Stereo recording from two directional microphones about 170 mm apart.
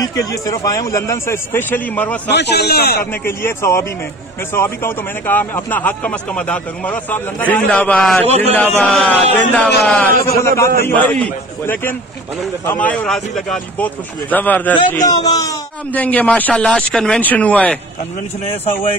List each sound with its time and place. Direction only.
0.0 s speech: 20° left (ahead or behind)
2.2 s a man's voice: 85° left; by 3.1 s 70° left (ahead or behind)
3.3 s speech: 15° left (ahead or behind)
8.3 s a man's voice: 40° right (ahead or behind)
8.7 s a man's voice: 10° left (ahead or behind)
15.0 s speech: 20° left (ahead or behind)
15.9 s speech: 10° left (ahead or behind)